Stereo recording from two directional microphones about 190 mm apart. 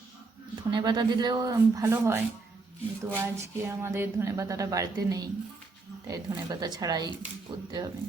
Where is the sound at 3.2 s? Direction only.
15° right (ahead or behind).